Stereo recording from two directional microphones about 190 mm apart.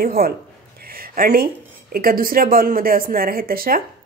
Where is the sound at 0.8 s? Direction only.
50° right (ahead or behind).